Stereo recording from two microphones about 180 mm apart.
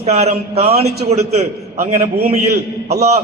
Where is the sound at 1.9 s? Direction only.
50° right (ahead or behind).